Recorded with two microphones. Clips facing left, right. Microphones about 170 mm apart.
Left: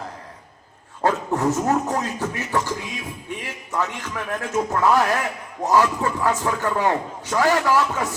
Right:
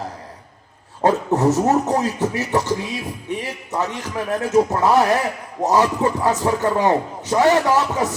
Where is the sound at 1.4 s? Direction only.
35° right (ahead or behind).